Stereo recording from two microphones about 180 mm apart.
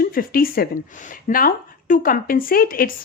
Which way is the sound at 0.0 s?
55° left (ahead or behind).